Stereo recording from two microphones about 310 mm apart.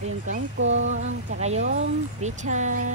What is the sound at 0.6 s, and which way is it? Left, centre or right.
Speech, right.